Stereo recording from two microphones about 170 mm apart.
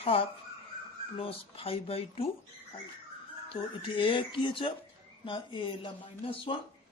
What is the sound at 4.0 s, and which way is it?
Speech, 30° left (ahead or behind).